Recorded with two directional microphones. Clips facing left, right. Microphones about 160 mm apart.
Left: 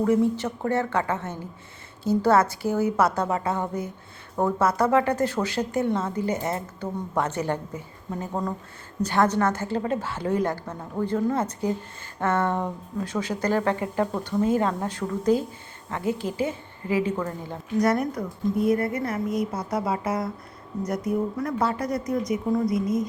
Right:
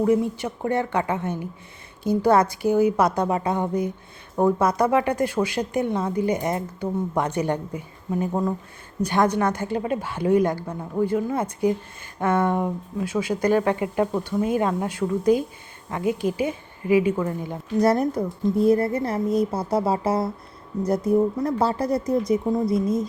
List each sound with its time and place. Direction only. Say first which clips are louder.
0.0 s speech: right 1 dB; 15° right (ahead or behind)
17.7 s a woman's voice: right 3 dB; 30° right (ahead or behind)